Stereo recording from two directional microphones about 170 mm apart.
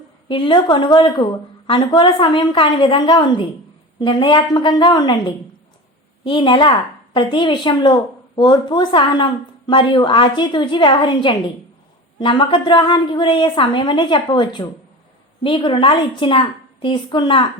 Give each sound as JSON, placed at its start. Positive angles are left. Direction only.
{"t": 0.3, "sound": "a woman's voice", "side_deg": 30}